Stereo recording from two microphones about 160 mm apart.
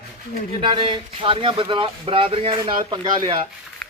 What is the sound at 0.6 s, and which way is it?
Speech, 35° right (ahead or behind).